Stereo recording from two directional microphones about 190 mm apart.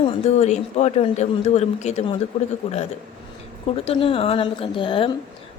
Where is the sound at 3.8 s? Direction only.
30° left (ahead or behind).